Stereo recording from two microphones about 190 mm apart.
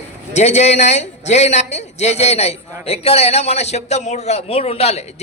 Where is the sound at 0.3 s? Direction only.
35° left (ahead or behind).